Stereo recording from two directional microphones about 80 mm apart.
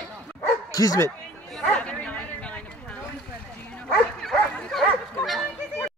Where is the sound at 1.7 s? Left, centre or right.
Centre.